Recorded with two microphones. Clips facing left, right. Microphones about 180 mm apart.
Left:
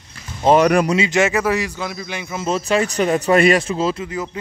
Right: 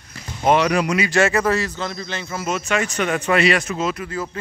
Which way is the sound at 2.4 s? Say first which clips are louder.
Left 4 dB; 35° left (ahead or behind).